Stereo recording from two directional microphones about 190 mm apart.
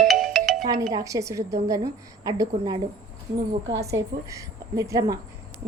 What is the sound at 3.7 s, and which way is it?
Speech, 70° right (ahead or behind).